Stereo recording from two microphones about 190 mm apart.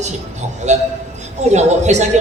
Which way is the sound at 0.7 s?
40° right (ahead or behind).